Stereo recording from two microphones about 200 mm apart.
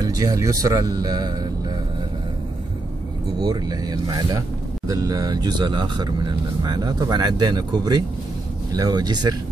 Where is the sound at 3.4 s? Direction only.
20° right (ahead or behind).